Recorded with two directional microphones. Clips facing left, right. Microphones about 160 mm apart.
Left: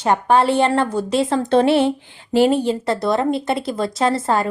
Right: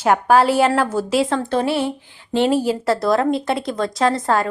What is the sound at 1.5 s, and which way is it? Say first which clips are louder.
Speech: left 9 dB; 25° left (ahead or behind).